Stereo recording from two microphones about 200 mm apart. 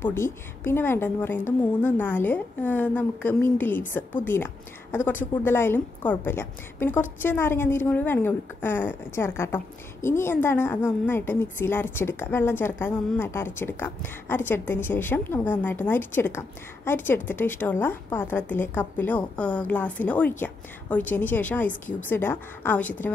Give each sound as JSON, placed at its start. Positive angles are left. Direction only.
{"t": 0.0, "sound": "a woman's voice", "side_deg": 10}